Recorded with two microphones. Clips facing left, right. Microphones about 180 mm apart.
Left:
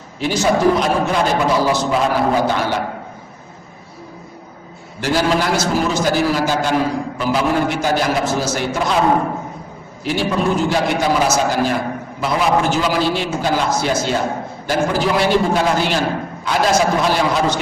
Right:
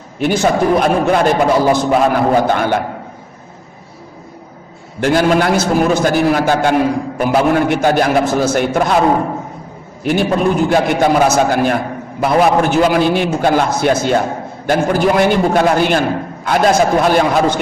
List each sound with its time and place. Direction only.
0.2 s a man's voice: 55° right (ahead or behind)
4.9 s a man's voice: 55° right (ahead or behind)
10.0 s a man's voice: 55° right (ahead or behind)